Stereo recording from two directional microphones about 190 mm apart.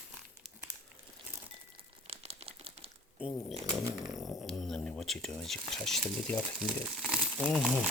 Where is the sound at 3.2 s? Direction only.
Centre (ahead or behind).